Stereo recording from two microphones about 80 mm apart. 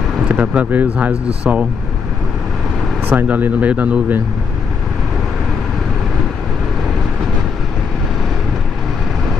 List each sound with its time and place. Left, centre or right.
0.3 s speech: right
3.1 s speech: right